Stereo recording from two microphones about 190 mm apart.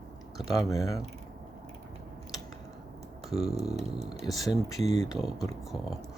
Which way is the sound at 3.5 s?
35° right (ahead or behind).